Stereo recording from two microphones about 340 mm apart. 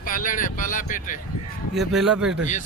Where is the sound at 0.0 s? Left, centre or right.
Left.